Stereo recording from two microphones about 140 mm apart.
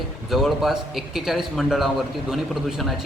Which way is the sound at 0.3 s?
Centre (ahead or behind).